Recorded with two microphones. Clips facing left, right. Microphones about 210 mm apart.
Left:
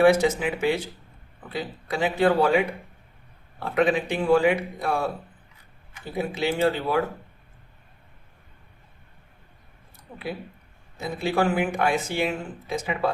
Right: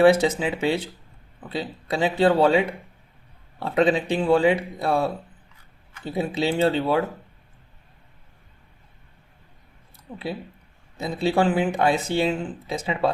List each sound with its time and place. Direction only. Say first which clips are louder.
0.0 s speech: right 1 dB; 30° right (ahead or behind)
6.1 s speech: right 2 dB; 30° right (ahead or behind)
10.9 s speech: right 3 dB; 30° right (ahead or behind)